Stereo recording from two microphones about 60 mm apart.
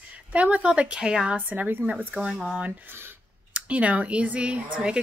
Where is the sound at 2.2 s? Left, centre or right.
Centre.